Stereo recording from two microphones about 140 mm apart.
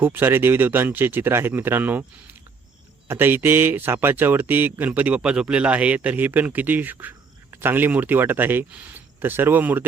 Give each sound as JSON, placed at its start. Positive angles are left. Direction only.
{"t": 0.0, "sound": "speech", "side_deg": -15}
{"t": 3.1, "sound": "speech", "side_deg": -15}